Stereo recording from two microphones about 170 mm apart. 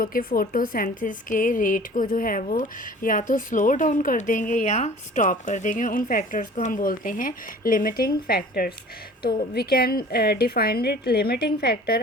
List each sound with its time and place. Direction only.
0.0 s a woman's voice: 55° left (ahead or behind)